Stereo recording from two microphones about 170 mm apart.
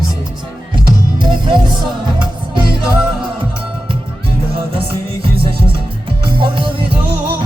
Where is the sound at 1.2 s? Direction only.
25° right (ahead or behind).